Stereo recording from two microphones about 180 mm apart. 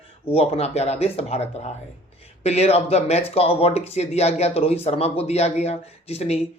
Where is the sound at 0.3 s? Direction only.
35° left (ahead or behind).